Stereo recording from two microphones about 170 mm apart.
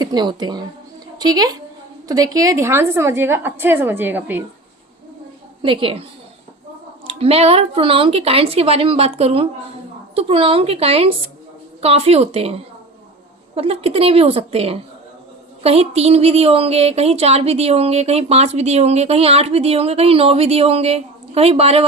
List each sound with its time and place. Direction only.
0.0 s a woman's voice: 25° right (ahead or behind)
5.6 s a woman's voice: 30° right (ahead or behind)
7.1 s a woman's voice: 35° right (ahead or behind)
13.6 s a woman's voice: 35° right (ahead or behind)